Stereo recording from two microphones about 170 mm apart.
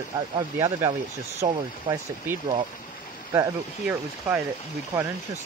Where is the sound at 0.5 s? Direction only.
20° right (ahead or behind).